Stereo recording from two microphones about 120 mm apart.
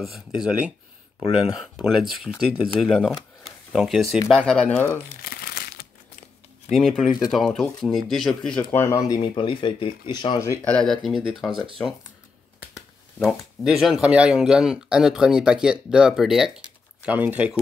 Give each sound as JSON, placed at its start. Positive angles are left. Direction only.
{"t": 1.3, "sound": "speech", "side_deg": -5}
{"t": 3.4, "sound": "a sound", "side_deg": 0}
{"t": 4.5, "sound": "speech", "side_deg": 5}
{"t": 4.7, "sound": "speech", "side_deg": 20}
{"t": 6.7, "sound": "speech", "side_deg": 0}
{"t": 8.7, "sound": "speech", "side_deg": 25}
{"t": 9.2, "sound": "speech", "side_deg": 45}
{"t": 10.6, "sound": "speech", "side_deg": 5}
{"t": 12.7, "sound": "speech", "side_deg": 0}